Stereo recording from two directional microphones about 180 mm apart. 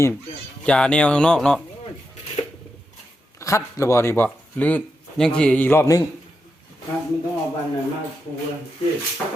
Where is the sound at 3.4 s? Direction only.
15° left (ahead or behind).